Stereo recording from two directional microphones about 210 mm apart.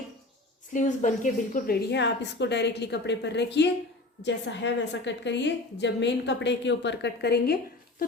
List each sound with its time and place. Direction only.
0.7 s a woman's voice: 35° left (ahead or behind)